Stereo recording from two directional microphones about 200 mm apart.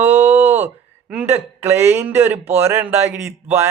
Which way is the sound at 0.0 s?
10° right (ahead or behind).